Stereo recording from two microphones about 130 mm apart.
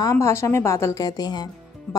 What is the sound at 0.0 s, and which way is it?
Speech, 20° left (ahead or behind).